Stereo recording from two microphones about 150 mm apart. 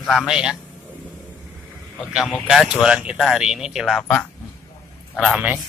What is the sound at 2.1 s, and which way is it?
Speech, centre (ahead or behind).